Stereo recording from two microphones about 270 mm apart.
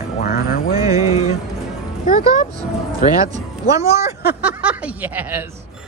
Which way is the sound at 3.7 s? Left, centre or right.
Centre.